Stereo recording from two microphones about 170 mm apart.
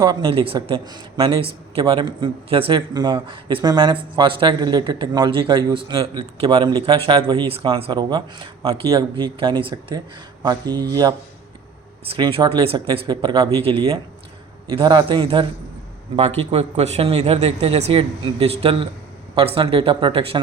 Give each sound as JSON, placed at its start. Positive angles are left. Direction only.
{"t": 0.0, "sound": "a man's voice", "side_deg": -25}